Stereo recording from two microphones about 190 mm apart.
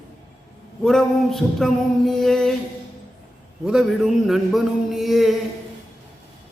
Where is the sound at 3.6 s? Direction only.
5° right (ahead or behind).